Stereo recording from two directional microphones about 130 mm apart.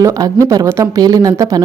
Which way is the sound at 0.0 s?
25° right (ahead or behind).